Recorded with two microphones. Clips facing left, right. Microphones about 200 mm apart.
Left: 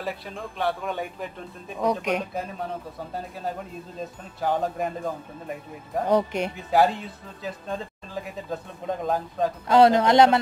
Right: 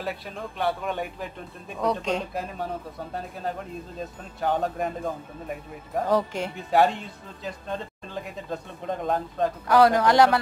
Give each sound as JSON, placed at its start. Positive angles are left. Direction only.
{"t": 0.0, "sound": "speech", "side_deg": 0}
{"t": 1.8, "sound": "speech", "side_deg": 15}
{"t": 2.3, "sound": "speech", "side_deg": 0}
{"t": 6.0, "sound": "speech", "side_deg": 20}
{"t": 6.7, "sound": "speech", "side_deg": 0}
{"t": 9.7, "sound": "speech", "side_deg": 25}